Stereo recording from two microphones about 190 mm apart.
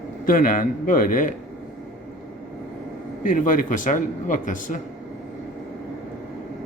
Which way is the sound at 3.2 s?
45° left (ahead or behind).